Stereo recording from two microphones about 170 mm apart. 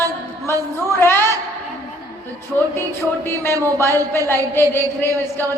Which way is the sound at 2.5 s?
10° left (ahead or behind).